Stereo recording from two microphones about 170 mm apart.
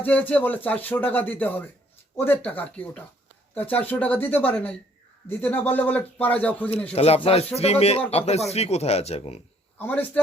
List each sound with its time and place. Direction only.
0.0 s speech: 10° left (ahead or behind)
6.9 s speech: 35° left (ahead or behind)
9.7 s speech: 10° left (ahead or behind)